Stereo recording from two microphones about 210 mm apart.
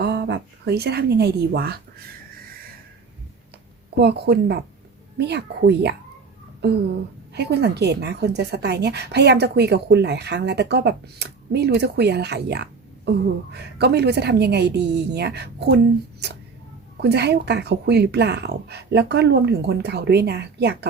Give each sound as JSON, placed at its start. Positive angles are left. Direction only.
{"t": 0.0, "sound": "speech", "side_deg": -50}
{"t": 3.9, "sound": "a woman's voice", "side_deg": -50}